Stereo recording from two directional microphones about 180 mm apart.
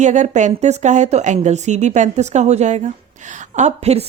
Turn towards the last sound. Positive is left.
turn(degrees=-35)  # may be behind; listen again after turning